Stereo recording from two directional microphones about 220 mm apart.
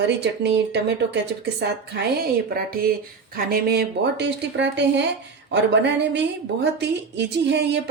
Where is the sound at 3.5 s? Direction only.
45° right (ahead or behind).